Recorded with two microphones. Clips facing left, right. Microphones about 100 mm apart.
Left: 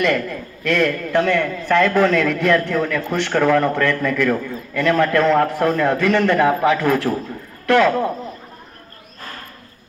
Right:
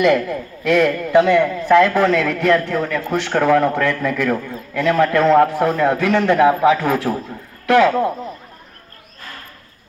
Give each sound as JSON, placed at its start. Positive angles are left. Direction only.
{"t": 0.0, "sound": "a man's voice", "side_deg": -10}